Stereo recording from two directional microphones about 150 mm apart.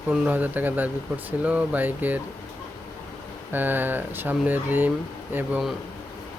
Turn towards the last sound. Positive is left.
turn(degrees=-5)  # may be behind; listen again after turning